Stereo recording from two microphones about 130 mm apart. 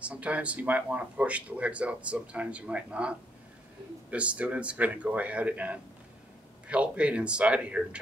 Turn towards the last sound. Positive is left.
turn(degrees=-10)  # may be behind; listen again after turning